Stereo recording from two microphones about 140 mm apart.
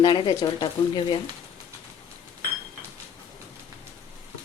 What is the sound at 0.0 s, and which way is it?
Speech, 35° left (ahead or behind).